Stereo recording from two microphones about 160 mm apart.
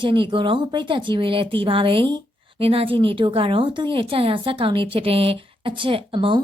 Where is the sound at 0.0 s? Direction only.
30° right (ahead or behind).